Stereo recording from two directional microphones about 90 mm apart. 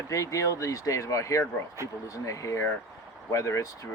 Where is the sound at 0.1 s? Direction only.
35° left (ahead or behind).